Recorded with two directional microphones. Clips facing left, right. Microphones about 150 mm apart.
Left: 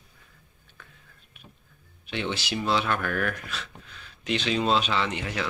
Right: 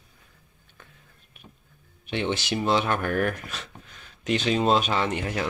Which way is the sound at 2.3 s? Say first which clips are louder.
Right 2 dB; 45° right (ahead or behind).